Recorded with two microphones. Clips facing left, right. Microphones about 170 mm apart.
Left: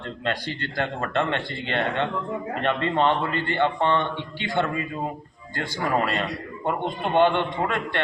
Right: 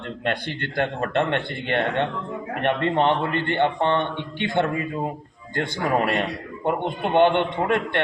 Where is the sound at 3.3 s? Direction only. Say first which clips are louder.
Right 2 dB; 55° right (ahead or behind).